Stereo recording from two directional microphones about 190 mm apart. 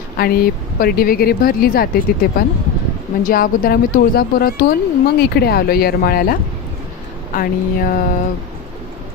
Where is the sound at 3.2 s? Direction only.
50° left (ahead or behind).